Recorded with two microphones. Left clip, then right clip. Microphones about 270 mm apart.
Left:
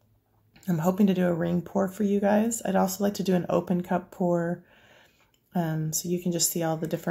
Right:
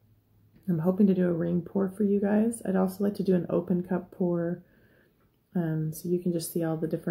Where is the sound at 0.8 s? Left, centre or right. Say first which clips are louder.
Left 1 dB; centre.